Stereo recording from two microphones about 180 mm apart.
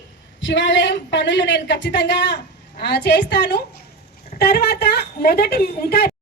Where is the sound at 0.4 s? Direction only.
90° left; by 6.1 s 60° left (ahead or behind).